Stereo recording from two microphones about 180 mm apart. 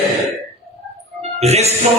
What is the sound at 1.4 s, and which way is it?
Speech, 35° right (ahead or behind).